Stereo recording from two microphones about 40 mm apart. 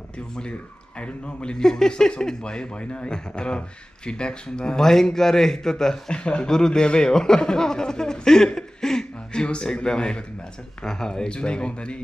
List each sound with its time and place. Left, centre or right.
0.4 s speech: left
4.8 s a man's voice: centre
6.1 s a man's voice: left